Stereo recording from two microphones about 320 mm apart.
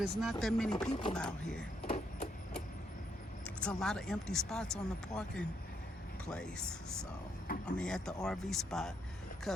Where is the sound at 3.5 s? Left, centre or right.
Centre.